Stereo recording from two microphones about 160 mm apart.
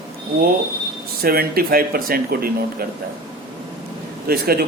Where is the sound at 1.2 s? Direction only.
70° right (ahead or behind).